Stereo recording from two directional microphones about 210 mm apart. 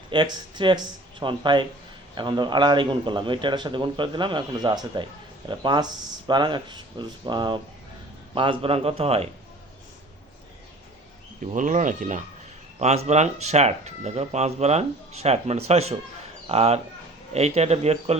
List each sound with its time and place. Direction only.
0.1 s speech: 20° right (ahead or behind)
11.5 s speech: 40° right (ahead or behind)